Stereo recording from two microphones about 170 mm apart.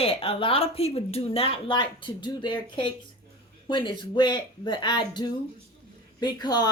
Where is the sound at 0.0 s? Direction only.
35° left (ahead or behind).